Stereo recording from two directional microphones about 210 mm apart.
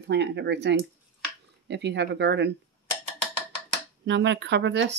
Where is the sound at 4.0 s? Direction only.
55° right (ahead or behind).